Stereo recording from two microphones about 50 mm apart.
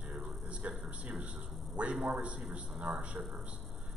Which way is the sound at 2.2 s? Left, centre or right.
Right.